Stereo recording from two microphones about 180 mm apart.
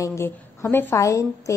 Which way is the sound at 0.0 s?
15° left (ahead or behind).